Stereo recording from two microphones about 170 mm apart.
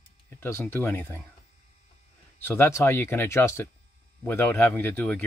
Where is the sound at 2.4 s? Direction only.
15° left (ahead or behind).